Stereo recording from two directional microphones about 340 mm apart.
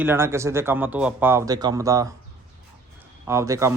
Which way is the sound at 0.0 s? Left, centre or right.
Centre.